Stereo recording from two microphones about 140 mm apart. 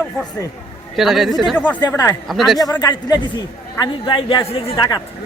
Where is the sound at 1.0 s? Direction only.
Centre (ahead or behind).